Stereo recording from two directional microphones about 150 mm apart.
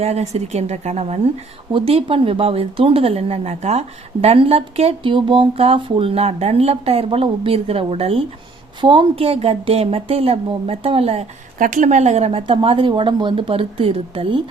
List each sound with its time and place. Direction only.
0.0 s a woman's voice: 45° right (ahead or behind)
11.6 s speech: 55° right (ahead or behind); by 14.4 s 35° right (ahead or behind)